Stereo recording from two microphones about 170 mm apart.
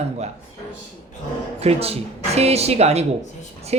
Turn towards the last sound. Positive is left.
turn(degrees=-40)  # may be behind; listen again after turning